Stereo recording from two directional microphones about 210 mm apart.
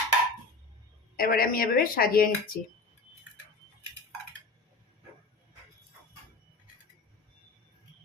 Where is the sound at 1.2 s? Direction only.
45° left (ahead or behind).